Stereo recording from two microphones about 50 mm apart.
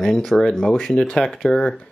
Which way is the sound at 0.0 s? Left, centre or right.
Centre.